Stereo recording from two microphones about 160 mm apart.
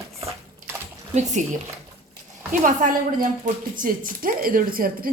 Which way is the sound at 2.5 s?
50° right (ahead or behind).